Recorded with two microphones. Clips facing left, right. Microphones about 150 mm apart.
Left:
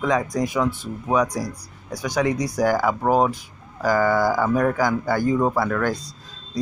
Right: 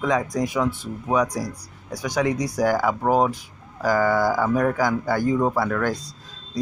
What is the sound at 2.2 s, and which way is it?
Speech, 5° right (ahead or behind).